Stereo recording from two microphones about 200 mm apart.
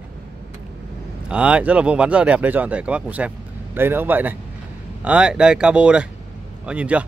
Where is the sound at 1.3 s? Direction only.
5° right (ahead or behind).